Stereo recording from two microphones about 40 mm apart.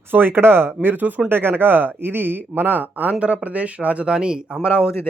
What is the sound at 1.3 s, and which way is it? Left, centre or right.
A man's voice, right.